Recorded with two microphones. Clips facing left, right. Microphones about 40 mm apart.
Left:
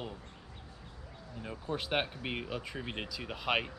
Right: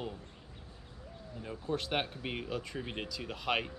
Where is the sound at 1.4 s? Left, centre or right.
Centre.